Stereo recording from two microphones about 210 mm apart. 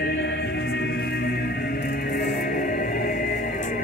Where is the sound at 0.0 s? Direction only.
55° left (ahead or behind).